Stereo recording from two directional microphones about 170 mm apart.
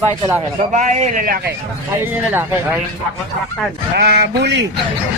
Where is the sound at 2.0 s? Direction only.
10° right (ahead or behind).